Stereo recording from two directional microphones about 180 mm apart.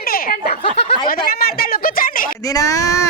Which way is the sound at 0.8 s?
35° left (ahead or behind).